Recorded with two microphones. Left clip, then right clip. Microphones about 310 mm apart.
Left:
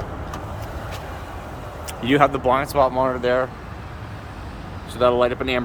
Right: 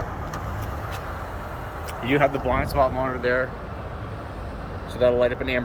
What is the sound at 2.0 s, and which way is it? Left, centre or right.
Speech, centre.